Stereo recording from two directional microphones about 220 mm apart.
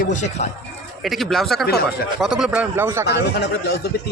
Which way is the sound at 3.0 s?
50° left (ahead or behind).